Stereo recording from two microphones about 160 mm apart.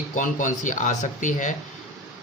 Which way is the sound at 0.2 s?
55° left (ahead or behind).